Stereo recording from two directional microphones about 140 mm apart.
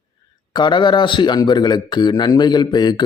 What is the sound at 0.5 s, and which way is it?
Speech, 30° left (ahead or behind).